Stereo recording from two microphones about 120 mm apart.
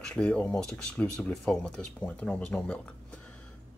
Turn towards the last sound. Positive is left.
turn(degrees=10)  # may be behind; listen again after turning